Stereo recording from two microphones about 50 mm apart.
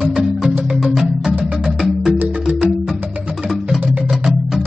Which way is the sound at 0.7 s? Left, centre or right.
Centre.